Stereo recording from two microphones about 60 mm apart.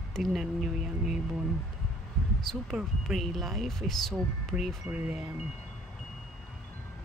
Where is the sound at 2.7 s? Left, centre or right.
Centre.